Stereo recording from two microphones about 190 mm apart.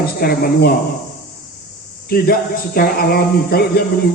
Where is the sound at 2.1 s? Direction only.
55° left (ahead or behind).